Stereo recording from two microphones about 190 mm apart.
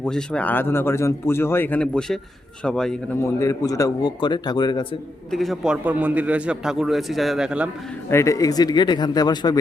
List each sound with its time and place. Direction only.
0.0 s a man's voice: 5° left (ahead or behind)
3.4 s speech: 15° left (ahead or behind)
5.3 s a man's voice: centre (ahead or behind)
8.1 s speech: 15° left (ahead or behind)